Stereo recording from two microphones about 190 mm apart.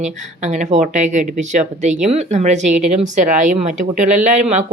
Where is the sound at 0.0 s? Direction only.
40° right (ahead or behind).